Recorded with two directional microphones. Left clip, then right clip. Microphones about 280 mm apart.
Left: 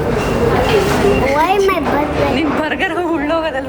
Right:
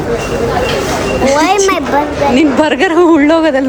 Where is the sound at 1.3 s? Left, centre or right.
Right.